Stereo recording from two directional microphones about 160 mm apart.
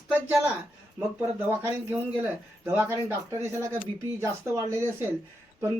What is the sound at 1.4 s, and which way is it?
Speech, 15° right (ahead or behind).